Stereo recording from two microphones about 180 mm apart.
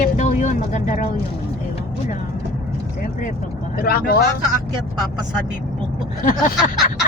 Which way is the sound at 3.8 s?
55° left (ahead or behind).